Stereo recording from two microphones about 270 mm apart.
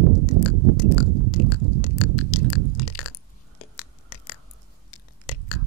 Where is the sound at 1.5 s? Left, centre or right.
Left.